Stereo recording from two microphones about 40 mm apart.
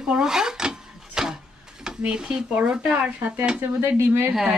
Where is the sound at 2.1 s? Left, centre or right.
Right.